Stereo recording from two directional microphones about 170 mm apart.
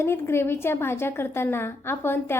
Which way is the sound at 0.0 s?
15° left (ahead or behind).